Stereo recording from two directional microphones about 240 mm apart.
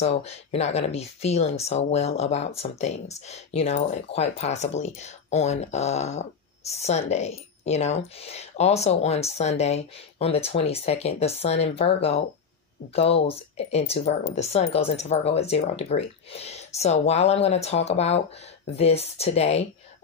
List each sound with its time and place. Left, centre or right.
0.0 s speech: left